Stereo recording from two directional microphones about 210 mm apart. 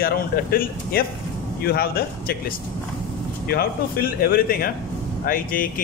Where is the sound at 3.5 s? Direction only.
45° left (ahead or behind).